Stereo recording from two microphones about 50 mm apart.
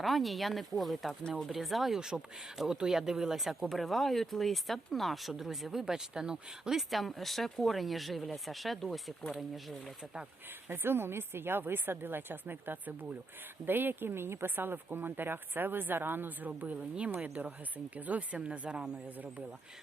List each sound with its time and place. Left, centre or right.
0.0 s speech: centre
2.0 s speech: centre
6.7 s speech: centre
10.7 s speech: right
16.5 s speech: right